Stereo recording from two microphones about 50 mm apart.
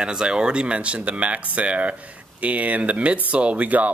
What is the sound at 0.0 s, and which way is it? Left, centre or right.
Speech, centre.